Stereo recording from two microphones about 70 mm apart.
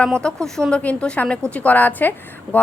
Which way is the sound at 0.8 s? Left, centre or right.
Centre.